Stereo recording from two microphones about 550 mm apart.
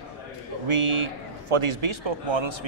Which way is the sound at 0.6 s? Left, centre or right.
Right.